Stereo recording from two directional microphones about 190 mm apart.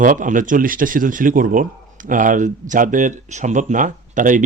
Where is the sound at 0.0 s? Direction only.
40° right (ahead or behind).